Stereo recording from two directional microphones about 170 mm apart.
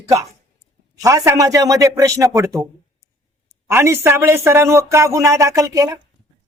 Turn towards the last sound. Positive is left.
turn(degrees=-20)  # may be behind; listen again after turning